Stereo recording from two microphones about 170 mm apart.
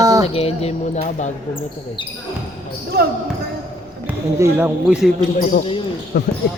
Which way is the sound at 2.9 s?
65° right (ahead or behind).